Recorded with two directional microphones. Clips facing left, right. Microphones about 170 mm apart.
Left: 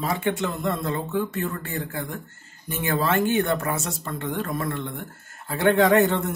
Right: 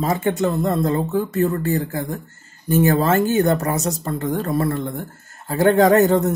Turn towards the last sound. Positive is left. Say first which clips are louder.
# right 5 dB
turn(degrees=-40)  # may be behind; listen again after turning